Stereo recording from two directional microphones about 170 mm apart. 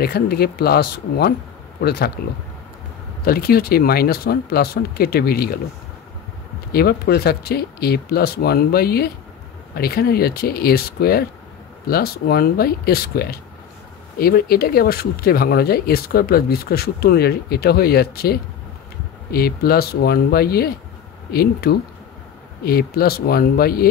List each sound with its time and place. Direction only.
0.0 s speech: 65° left (ahead or behind)
3.3 s speech: 65° left (ahead or behind)
6.7 s speech: 65° left (ahead or behind)